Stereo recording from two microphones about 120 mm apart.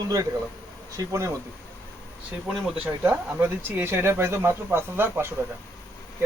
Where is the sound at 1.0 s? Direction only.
25° right (ahead or behind).